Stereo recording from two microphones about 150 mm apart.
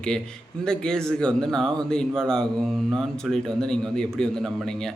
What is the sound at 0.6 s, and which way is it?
A man's voice, 5° left (ahead or behind).